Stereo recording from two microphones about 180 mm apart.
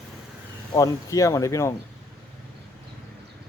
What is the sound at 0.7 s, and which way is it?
Speech, 20° left (ahead or behind).